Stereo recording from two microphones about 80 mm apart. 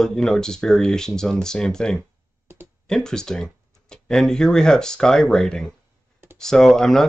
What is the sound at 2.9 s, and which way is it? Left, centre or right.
Speech, centre.